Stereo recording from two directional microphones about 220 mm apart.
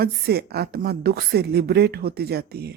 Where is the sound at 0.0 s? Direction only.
45° right (ahead or behind).